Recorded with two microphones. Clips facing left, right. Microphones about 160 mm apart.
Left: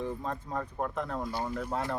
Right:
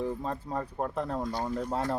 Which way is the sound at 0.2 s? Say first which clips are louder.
Right 2 dB; 30° right (ahead or behind).